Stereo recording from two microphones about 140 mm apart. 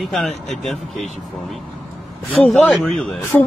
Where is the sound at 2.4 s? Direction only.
5° left (ahead or behind).